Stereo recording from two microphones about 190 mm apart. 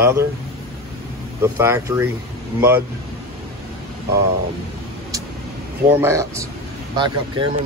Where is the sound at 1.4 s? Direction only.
15° right (ahead or behind).